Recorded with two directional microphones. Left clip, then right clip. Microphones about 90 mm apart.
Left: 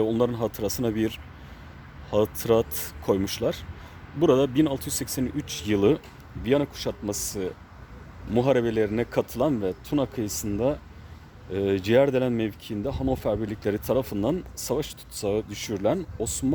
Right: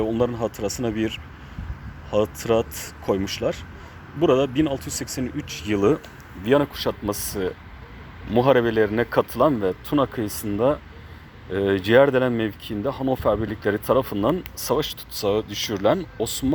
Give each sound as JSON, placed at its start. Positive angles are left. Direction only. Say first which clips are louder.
{"t": 0.0, "sound": "speech", "louder": "right 1 dB", "side_deg": 75}
{"t": 6.4, "sound": "a man's voice", "louder": "right 5 dB", "side_deg": 10}
{"t": 7.1, "sound": "speech", "louder": "right 4 dB", "side_deg": 25}